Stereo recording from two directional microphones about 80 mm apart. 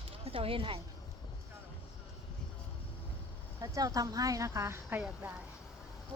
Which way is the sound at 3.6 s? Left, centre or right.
Right.